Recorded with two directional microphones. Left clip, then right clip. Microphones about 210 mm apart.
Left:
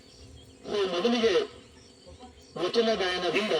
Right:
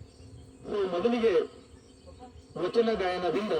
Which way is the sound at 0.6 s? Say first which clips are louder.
Left 1 dB; 45° right (ahead or behind).